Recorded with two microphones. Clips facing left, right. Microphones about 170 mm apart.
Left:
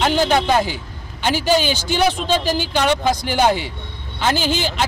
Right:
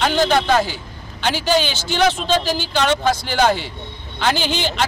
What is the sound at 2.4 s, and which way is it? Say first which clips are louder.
Speech: left 2 dB; 50° left (ahead or behind).